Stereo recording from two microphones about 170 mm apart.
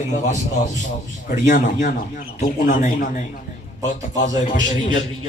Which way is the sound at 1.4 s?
50° left (ahead or behind).